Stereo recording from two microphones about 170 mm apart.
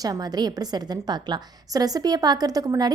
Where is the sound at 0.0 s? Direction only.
20° right (ahead or behind).